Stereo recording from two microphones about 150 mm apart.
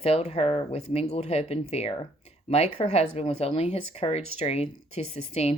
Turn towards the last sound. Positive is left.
turn(degrees=45)  # may be behind; listen again after turning